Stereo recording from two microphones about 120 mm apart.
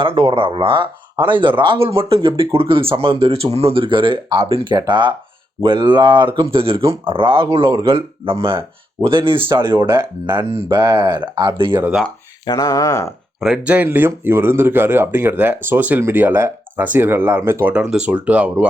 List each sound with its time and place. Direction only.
0.0 s speech: 45° right (ahead or behind)
12.5 s speech: 30° left (ahead or behind)
13.4 s speech: 10° right (ahead or behind)
17.7 s speech: 10° right (ahead or behind)